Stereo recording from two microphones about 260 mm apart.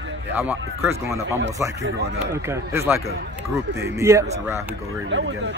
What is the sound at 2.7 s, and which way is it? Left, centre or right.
Speech, centre.